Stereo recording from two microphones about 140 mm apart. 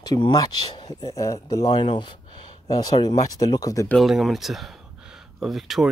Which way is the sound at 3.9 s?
Centre (ahead or behind).